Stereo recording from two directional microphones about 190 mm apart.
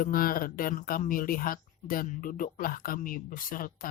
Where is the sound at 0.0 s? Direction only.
50° left (ahead or behind).